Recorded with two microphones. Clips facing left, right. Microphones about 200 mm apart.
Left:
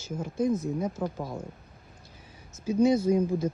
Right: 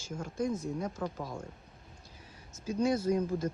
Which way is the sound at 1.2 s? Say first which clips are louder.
Left 4 dB; 25° left (ahead or behind).